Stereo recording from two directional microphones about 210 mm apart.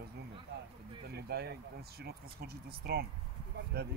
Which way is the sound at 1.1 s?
50° right (ahead or behind).